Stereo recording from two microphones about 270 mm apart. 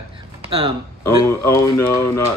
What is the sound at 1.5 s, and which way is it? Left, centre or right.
Speech, centre.